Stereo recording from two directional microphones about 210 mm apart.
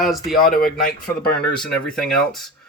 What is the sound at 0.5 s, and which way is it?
Speech, 45° left (ahead or behind).